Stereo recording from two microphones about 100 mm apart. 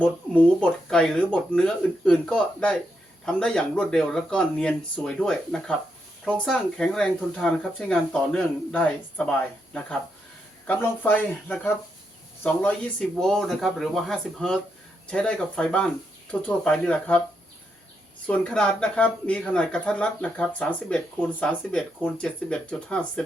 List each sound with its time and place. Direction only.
0.6 s speech: 5° left (ahead or behind)
13.0 s speech: 5° left (ahead or behind)
18.3 s speech: 10° left (ahead or behind)